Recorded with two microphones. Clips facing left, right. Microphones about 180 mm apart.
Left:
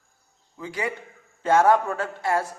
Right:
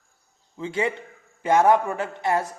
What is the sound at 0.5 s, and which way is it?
A man's voice, 25° right (ahead or behind).